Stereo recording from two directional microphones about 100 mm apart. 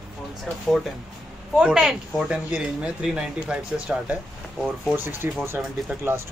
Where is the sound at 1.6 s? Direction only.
5° right (ahead or behind).